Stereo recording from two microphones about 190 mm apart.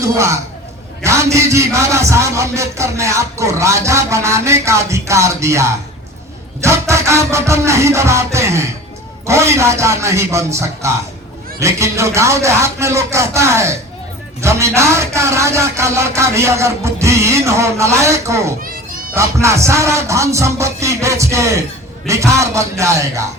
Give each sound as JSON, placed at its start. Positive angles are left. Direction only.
{"t": 0.0, "sound": "a man's voice", "side_deg": -15}